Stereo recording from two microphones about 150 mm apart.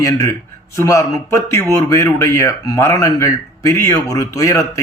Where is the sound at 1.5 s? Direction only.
20° left (ahead or behind).